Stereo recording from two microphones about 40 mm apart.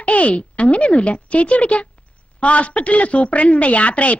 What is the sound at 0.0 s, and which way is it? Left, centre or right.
A woman's voice, left.